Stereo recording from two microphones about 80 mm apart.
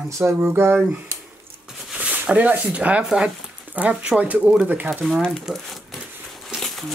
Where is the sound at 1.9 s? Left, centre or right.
Centre.